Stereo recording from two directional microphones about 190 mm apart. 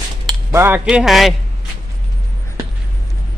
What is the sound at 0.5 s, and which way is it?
Speech, 10° right (ahead or behind).